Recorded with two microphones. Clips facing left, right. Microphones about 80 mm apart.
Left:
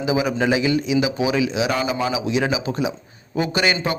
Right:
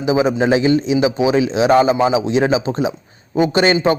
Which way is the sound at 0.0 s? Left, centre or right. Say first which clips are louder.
Right 5 dB; right.